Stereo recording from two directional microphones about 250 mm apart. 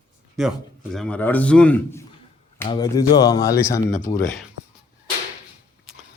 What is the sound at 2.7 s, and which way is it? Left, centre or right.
A man's voice, centre.